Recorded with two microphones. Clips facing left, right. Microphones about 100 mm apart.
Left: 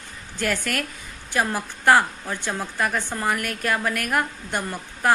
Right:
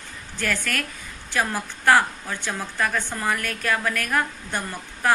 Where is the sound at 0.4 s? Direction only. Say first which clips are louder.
Left 2 dB; 20° left (ahead or behind).